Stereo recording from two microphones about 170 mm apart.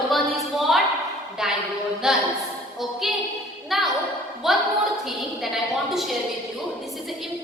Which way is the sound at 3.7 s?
Centre (ahead or behind).